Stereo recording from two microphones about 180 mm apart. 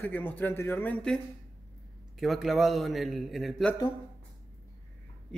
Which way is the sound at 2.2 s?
Centre (ahead or behind).